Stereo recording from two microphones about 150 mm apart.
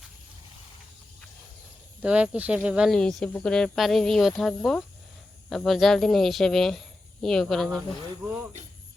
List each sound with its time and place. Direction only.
2.0 s speech: 10° right (ahead or behind)